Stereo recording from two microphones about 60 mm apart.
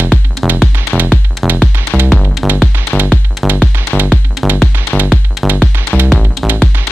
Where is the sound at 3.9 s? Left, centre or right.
Centre.